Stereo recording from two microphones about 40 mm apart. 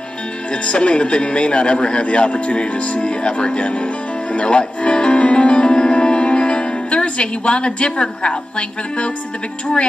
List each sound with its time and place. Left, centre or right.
0.5 s a man's voice: left